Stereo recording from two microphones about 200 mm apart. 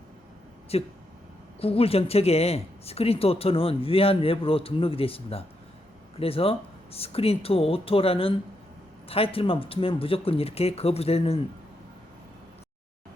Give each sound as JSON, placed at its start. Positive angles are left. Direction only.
{"t": 0.7, "sound": "speech", "side_deg": 30}